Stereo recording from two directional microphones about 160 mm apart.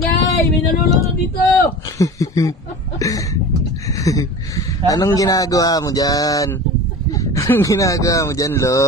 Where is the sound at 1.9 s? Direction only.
20° left (ahead or behind).